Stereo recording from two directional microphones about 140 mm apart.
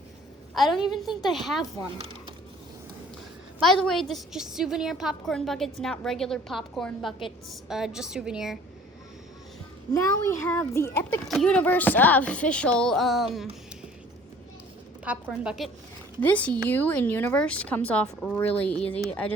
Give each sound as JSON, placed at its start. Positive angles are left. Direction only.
{"t": 0.5, "sound": "a woman's voice", "side_deg": 0}
{"t": 3.6, "sound": "a woman's voice", "side_deg": 5}
{"t": 9.9, "sound": "a child's voice", "side_deg": 20}
{"t": 11.3, "sound": "speech", "side_deg": 5}
{"t": 15.0, "sound": "a woman's voice", "side_deg": -5}
{"t": 16.2, "sound": "speech", "side_deg": 10}